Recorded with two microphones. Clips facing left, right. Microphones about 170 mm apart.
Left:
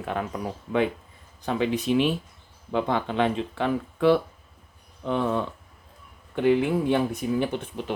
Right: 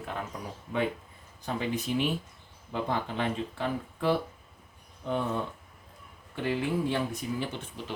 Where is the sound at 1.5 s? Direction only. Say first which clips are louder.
Left 7 dB; 90° left.